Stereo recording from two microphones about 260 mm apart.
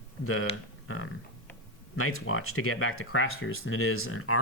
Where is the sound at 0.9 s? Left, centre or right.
Left.